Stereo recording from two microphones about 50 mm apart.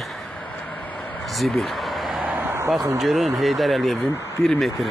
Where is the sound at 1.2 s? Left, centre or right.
Centre.